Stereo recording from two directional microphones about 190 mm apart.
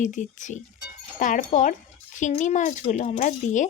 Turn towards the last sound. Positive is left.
turn(degrees=40)  # may be behind; listen again after turning